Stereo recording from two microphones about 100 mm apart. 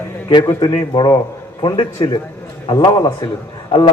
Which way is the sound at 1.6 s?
60° left (ahead or behind).